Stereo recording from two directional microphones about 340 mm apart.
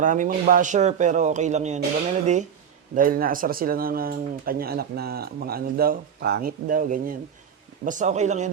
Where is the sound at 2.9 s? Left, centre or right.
Right.